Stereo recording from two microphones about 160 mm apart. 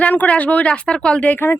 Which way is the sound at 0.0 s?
10° left (ahead or behind).